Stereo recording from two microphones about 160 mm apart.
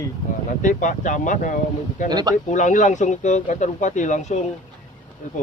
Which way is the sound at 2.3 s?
50° left (ahead or behind).